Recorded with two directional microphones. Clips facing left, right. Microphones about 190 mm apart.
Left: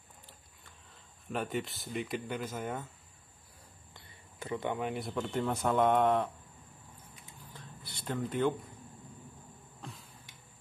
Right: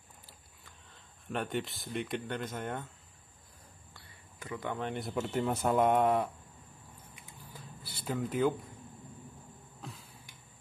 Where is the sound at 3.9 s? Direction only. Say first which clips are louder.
Left 1 dB; 25° left (ahead or behind).